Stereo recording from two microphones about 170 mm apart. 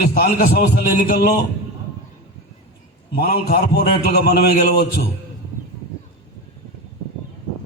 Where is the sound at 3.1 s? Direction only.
60° left (ahead or behind).